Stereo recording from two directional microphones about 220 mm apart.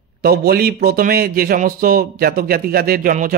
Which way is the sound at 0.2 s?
45° right (ahead or behind).